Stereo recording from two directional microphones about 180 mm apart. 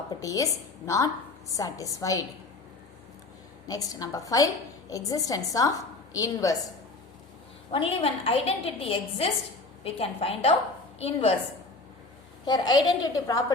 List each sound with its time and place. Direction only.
0.1 s a woman's voice: 20° left (ahead or behind)
3.7 s a woman's voice: 20° left (ahead or behind)
7.7 s a woman's voice: 30° left (ahead or behind)
12.5 s a woman's voice: 20° left (ahead or behind)